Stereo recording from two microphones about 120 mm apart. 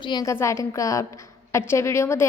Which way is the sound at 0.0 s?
40° left (ahead or behind).